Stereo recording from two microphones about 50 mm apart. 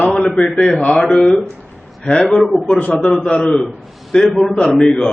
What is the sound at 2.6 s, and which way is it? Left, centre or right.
Speech, centre.